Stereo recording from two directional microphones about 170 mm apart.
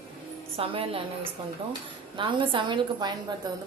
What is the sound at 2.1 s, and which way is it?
A woman's voice, 30° right (ahead or behind).